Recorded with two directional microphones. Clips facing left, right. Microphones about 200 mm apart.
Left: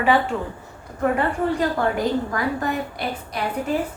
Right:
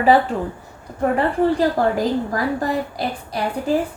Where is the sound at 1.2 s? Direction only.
35° right (ahead or behind).